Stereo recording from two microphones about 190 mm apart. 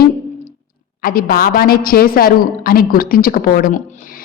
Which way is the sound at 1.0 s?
50° left (ahead or behind).